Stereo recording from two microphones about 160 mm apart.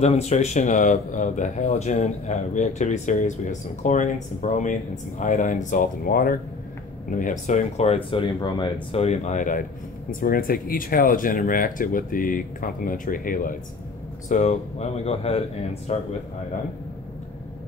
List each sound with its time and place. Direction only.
0.0 s speech: 45° left (ahead or behind)
8.9 s speech: 45° left (ahead or behind); by 13.6 s 60° left (ahead or behind)
14.3 s speech: 45° left (ahead or behind)